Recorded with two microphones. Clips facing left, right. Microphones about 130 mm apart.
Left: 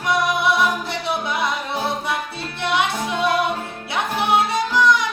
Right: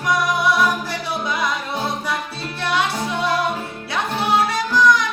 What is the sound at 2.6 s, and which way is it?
Music, 20° left (ahead or behind).